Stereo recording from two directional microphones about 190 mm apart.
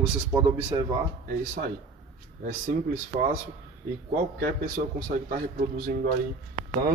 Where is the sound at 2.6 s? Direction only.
45° right (ahead or behind).